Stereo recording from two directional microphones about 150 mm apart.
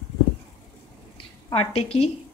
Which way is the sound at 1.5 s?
40° left (ahead or behind).